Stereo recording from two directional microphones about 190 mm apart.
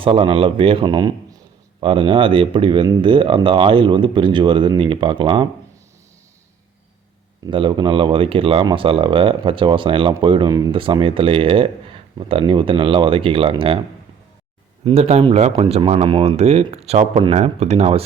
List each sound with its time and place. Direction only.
0.0 s speech: 30° right (ahead or behind)
7.4 s speech: 25° right (ahead or behind)
14.8 s speech: 35° right (ahead or behind)